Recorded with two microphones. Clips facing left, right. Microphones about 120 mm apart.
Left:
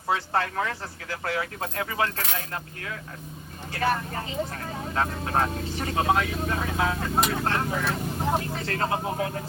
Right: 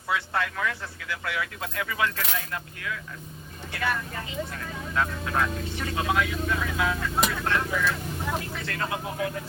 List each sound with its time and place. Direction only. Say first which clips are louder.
0.1 s speech: left 2 dB; 35° left (ahead or behind)